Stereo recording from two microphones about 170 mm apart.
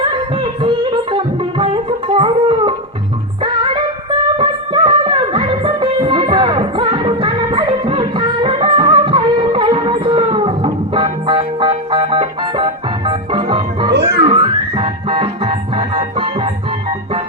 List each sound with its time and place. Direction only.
0.6 s music: 30° right (ahead or behind)
13.9 s music: 80° right
14.3 s music: 30° right (ahead or behind)